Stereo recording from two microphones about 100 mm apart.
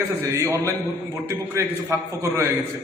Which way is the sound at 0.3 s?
30° right (ahead or behind).